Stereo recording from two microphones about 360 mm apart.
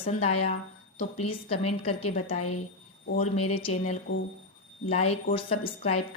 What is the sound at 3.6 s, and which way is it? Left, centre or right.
Speech, centre.